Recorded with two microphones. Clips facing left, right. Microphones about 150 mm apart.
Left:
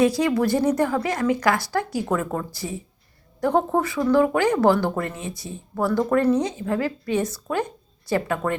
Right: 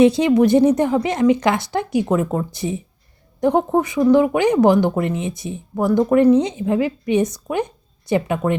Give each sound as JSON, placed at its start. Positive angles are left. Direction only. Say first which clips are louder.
{"t": 0.0, "sound": "speech", "louder": "right 6 dB", "side_deg": -20}